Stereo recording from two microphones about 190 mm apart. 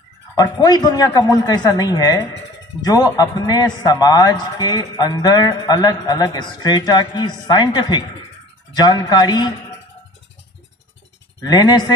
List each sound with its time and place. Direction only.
0.4 s a man's voice: 20° left (ahead or behind)
11.4 s a man's voice: 20° left (ahead or behind)